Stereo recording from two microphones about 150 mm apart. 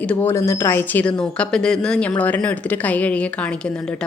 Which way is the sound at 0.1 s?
15° left (ahead or behind).